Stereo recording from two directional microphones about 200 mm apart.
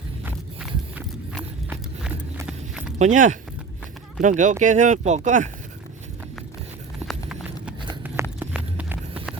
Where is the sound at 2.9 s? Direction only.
40° right (ahead or behind).